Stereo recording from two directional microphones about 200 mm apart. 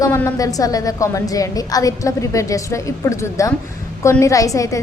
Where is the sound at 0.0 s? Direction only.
15° left (ahead or behind).